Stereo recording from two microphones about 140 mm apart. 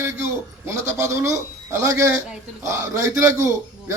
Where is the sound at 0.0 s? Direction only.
20° right (ahead or behind).